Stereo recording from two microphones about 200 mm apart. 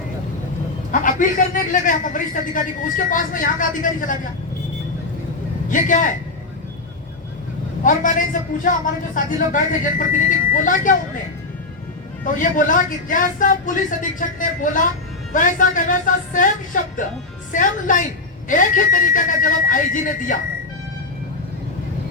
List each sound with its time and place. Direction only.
0.9 s a man's voice: 40° left (ahead or behind)
5.7 s a man's voice: 40° left (ahead or behind)
7.9 s a man's voice: 40° left (ahead or behind)
12.2 s a man's voice: 40° left (ahead or behind)